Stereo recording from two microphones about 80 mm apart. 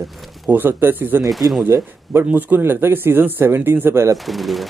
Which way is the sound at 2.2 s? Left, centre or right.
Right.